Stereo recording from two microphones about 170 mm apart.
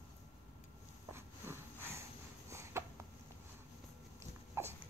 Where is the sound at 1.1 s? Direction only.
15° right (ahead or behind).